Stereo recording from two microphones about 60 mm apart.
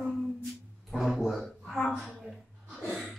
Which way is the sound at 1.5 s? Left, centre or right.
Centre.